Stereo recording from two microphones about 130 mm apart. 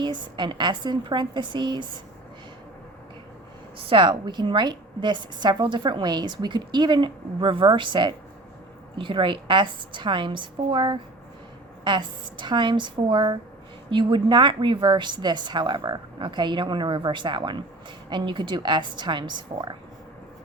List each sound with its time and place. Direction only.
0.0 s a woman's voice: 35° right (ahead or behind)
3.8 s a woman's voice: 40° right (ahead or behind)